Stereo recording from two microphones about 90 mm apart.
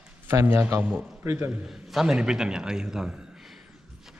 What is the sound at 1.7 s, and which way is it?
Speech, 5° right (ahead or behind).